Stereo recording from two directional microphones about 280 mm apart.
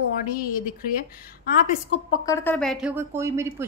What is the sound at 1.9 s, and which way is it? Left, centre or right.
A woman's voice, centre.